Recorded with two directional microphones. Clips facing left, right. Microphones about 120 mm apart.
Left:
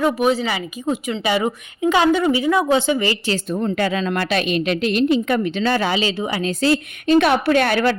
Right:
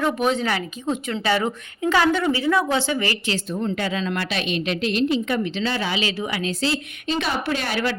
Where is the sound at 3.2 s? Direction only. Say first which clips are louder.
Left 4 dB; 50° left (ahead or behind).